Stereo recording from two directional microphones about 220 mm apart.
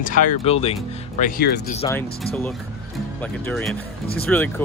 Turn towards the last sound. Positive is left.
turn(degrees=10)  # may be behind; listen again after turning